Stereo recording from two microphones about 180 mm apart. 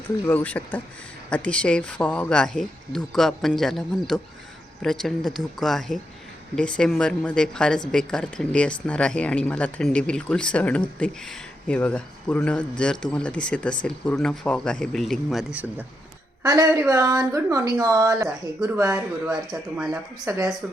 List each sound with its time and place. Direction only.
0.3 s speech: 10° left (ahead or behind)
16.4 s speech: 20° right (ahead or behind)
19.5 s speech: 5° right (ahead or behind)
20.2 s speech: 15° right (ahead or behind)